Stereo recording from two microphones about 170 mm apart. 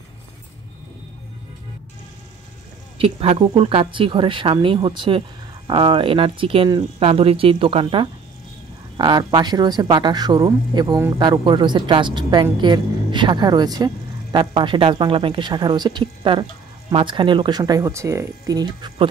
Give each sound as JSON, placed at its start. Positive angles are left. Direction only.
{"t": 3.0, "sound": "speech", "side_deg": -35}